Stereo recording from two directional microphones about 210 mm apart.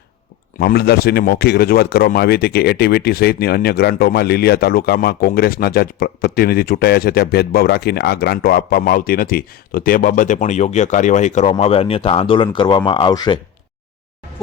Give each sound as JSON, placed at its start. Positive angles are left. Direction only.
{"t": 0.6, "sound": "speech", "side_deg": 50}